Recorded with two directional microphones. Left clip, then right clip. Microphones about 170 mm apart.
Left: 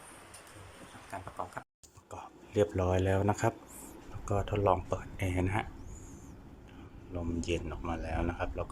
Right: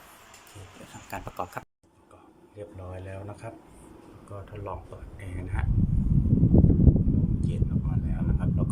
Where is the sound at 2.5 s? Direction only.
35° left (ahead or behind).